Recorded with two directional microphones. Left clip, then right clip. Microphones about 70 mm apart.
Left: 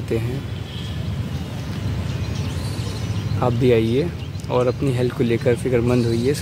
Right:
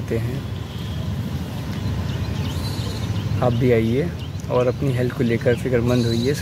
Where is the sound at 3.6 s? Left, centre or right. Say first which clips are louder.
Left 3 dB; left.